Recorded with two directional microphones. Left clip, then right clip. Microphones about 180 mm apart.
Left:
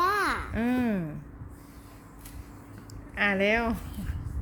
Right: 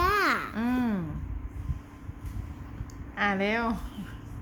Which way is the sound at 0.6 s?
10° left (ahead or behind).